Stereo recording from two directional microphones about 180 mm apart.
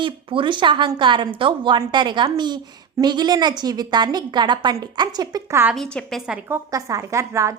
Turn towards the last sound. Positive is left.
turn(degrees=-15)  # may be behind; listen again after turning